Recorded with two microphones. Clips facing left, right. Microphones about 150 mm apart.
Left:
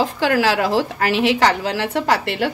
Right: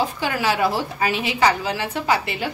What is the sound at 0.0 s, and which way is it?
A woman's voice, 90° left.